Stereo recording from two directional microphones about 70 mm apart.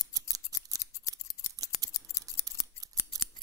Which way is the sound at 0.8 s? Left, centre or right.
Left.